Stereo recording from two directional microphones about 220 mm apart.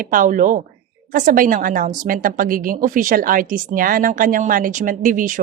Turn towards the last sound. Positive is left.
turn(degrees=-35)  # may be behind; listen again after turning